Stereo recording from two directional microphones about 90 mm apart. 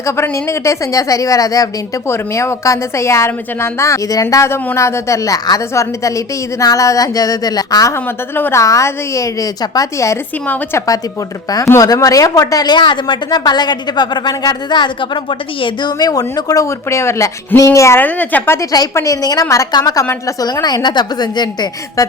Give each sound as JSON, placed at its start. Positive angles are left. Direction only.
{"t": 0.0, "sound": "a woman's voice", "side_deg": 30}
{"t": 2.0, "sound": "a woman's voice", "side_deg": 30}
{"t": 7.9, "sound": "a woman's voice", "side_deg": 25}
{"t": 8.6, "sound": "a woman's voice", "side_deg": 35}
{"t": 10.4, "sound": "a woman's voice", "side_deg": 20}
{"t": 10.8, "sound": "a woman's voice", "side_deg": 40}
{"t": 16.0, "sound": "a woman's voice", "side_deg": 45}
{"t": 18.0, "sound": "a woman's voice", "side_deg": 20}
{"t": 18.9, "sound": "a woman's voice", "side_deg": 40}